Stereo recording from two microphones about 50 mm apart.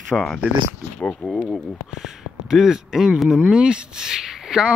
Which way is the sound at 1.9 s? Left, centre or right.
Centre.